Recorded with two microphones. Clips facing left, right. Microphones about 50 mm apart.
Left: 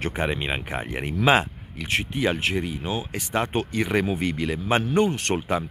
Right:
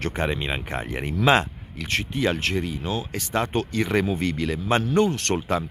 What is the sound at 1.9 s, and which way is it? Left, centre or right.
Speech, left.